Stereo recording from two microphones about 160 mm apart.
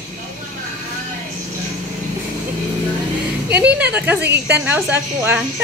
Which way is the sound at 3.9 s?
10° right (ahead or behind).